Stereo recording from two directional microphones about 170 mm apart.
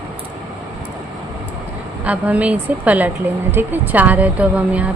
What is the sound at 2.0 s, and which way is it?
A woman's voice, 10° right (ahead or behind).